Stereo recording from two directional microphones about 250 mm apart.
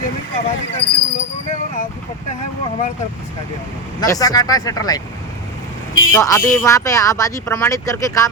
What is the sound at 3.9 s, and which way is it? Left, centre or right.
Speech, centre.